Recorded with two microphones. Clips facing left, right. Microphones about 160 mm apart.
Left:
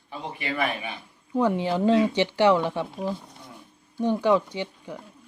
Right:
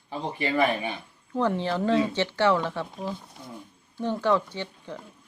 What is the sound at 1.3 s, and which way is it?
A woman's voice, 15° left (ahead or behind).